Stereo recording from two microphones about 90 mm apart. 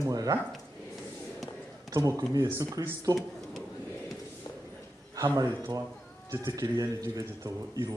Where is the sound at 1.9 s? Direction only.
40° right (ahead or behind).